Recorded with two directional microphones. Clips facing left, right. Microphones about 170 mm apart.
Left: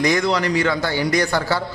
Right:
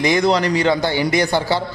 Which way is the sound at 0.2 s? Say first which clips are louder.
Right 3 dB; 35° right (ahead or behind).